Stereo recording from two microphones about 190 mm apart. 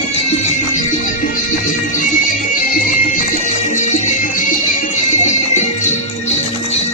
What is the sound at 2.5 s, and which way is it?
Music, 45° left (ahead or behind).